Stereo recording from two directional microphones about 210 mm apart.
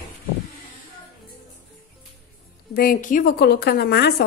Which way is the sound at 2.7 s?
40° left (ahead or behind).